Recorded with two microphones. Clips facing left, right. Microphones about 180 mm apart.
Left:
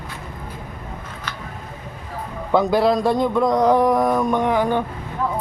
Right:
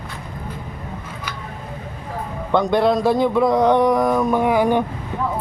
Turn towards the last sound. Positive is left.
turn(degrees=-10)  # may be behind; listen again after turning